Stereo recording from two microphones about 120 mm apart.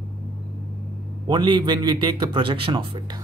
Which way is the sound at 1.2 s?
40° right (ahead or behind).